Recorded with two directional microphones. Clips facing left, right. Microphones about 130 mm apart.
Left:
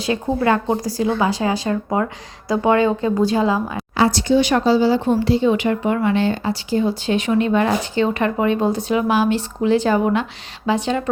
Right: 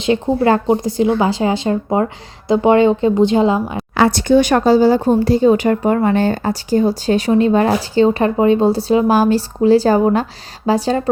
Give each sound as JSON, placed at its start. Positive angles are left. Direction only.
{"t": 0.0, "sound": "speech", "side_deg": -30}
{"t": 3.9, "sound": "speech", "side_deg": -60}